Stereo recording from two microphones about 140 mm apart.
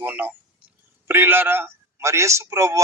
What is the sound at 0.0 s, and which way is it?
Speech, 15° right (ahead or behind).